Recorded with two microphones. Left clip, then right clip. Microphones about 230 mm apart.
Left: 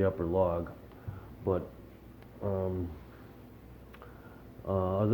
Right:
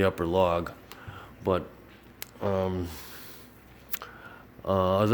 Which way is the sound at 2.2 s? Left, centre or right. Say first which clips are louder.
Right 6 dB; right.